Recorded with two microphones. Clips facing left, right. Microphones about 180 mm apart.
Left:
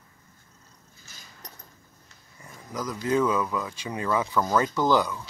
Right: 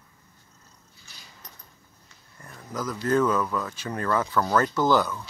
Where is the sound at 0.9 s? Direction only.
45° left (ahead or behind).